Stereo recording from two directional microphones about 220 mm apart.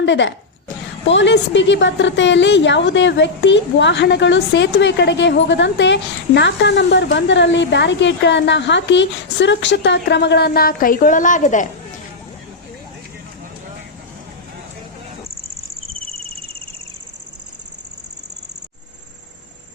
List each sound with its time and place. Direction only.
0.0 s a woman's voice: 55° left (ahead or behind); by 11.7 s 35° left (ahead or behind)